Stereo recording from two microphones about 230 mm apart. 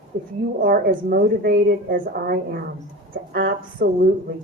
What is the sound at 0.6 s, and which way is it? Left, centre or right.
A woman's voice, right.